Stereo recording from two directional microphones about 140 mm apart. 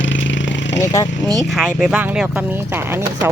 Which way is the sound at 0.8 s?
25° left (ahead or behind).